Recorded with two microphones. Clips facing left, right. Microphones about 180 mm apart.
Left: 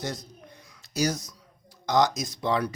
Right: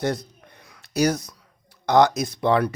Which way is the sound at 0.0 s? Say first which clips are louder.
Right 9 dB; 60° right (ahead or behind).